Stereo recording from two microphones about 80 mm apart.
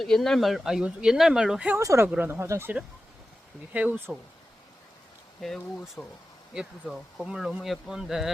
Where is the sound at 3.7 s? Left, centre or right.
Centre.